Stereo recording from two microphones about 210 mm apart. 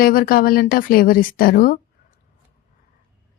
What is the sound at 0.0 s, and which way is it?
Speech, 45° left (ahead or behind).